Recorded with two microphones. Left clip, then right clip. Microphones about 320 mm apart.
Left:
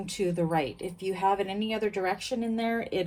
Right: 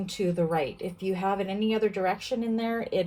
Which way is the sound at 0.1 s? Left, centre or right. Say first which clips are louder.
Right 1 dB; left.